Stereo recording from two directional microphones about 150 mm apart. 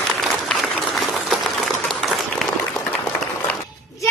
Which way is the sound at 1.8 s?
Centre (ahead or behind).